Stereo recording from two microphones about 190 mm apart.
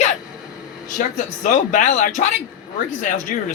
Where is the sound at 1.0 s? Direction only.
40° left (ahead or behind).